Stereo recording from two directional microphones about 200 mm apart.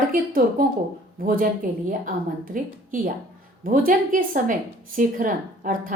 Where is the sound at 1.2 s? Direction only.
45° right (ahead or behind).